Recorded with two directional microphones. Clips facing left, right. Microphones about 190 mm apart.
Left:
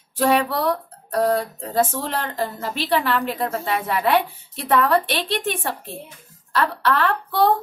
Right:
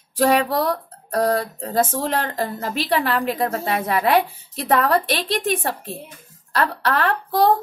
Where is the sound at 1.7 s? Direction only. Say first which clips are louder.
Right 1 dB; 45° right (ahead or behind).